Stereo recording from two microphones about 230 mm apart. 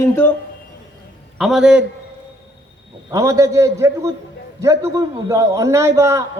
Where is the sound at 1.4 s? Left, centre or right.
Centre.